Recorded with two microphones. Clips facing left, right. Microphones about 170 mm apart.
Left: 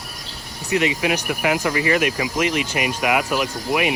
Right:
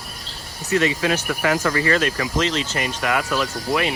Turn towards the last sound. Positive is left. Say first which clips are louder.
# left 1 dB
turn(degrees=15)  # may be behind; listen again after turning